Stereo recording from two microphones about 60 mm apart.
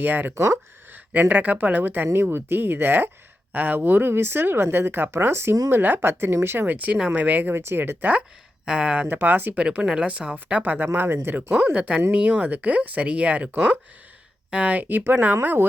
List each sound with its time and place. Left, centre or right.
0.0 s speech: right
0.3 s speech: right
0.9 s speech: right
6.7 s speech: right
7.5 s speech: right
8.6 s speech: centre
9.0 s speech: right
9.6 s speech: centre
10.6 s speech: right
11.7 s speech: centre
13.5 s speech: right